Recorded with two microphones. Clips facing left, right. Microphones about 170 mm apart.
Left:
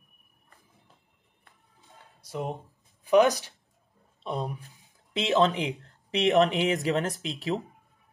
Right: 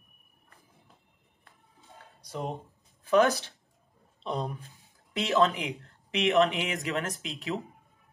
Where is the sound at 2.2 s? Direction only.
5° left (ahead or behind).